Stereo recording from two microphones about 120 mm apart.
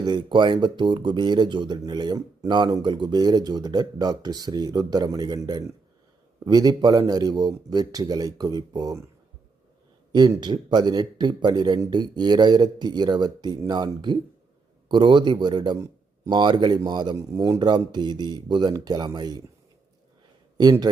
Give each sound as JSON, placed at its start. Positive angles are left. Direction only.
{"t": 0.0, "sound": "speech", "side_deg": -40}
{"t": 10.1, "sound": "speech", "side_deg": -35}
{"t": 20.6, "sound": "speech", "side_deg": -35}